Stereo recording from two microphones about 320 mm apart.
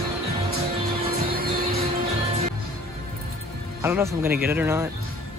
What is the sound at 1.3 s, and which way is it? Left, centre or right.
Music, right.